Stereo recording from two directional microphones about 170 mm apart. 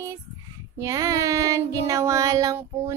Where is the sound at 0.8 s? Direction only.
20° right (ahead or behind).